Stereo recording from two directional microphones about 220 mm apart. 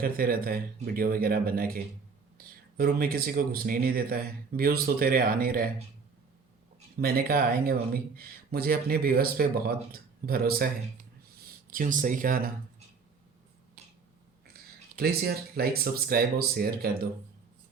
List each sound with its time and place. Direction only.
0.0 s speech: 40° right (ahead or behind)
7.0 s speech: 45° right (ahead or behind)
14.4 s speech: 45° right (ahead or behind)